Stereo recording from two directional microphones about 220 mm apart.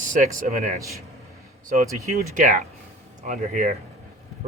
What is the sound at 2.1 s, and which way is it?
A man's voice, 35° right (ahead or behind).